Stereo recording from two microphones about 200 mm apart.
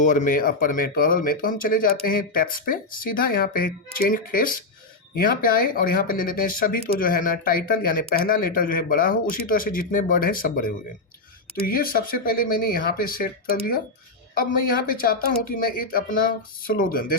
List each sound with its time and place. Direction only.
0.0 s speech: 40° left (ahead or behind)
14.8 s speech: 45° left (ahead or behind)